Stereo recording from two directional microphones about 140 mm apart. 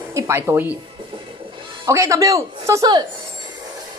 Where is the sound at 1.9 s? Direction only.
25° right (ahead or behind).